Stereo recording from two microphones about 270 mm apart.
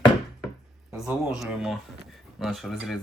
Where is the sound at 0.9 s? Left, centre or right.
Centre.